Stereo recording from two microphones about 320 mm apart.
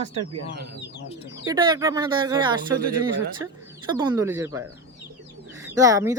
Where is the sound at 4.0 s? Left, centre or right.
Centre.